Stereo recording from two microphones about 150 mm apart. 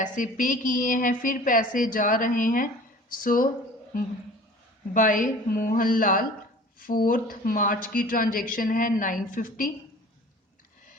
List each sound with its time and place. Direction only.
0.0 s a woman's voice: 60° left (ahead or behind)
4.9 s a woman's voice: 60° left (ahead or behind)